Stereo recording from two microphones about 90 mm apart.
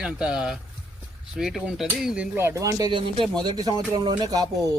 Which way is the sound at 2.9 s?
75° right (ahead or behind).